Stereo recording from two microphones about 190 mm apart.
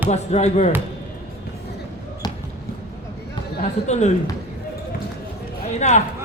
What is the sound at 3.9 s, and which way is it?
Speech, 35° left (ahead or behind).